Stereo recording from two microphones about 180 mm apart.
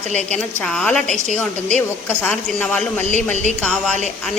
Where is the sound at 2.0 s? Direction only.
10° left (ahead or behind).